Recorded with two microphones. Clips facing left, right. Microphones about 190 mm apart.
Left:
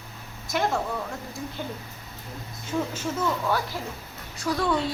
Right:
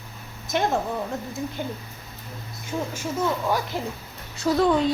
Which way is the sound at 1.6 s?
15° right (ahead or behind).